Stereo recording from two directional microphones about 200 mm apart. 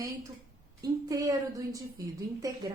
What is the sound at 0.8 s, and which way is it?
A woman's voice, 15° right (ahead or behind).